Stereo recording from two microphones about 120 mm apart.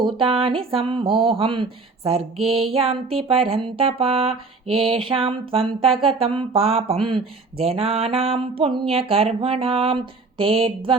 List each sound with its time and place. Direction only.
0.0 s speech: 50° right (ahead or behind)
7.6 s speech: 55° right (ahead or behind)